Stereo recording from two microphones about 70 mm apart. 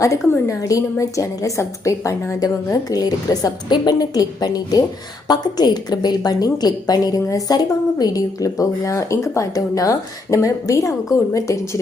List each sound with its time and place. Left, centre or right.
0.0 s a woman's voice: left
2.9 s a woman's voice: left
5.3 s a woman's voice: left